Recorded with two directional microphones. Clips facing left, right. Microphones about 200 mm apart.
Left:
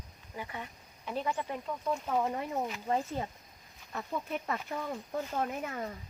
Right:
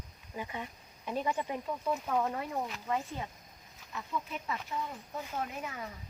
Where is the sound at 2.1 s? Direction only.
15° left (ahead or behind).